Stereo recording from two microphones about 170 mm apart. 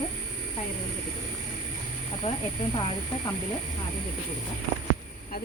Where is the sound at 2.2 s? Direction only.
40° left (ahead or behind).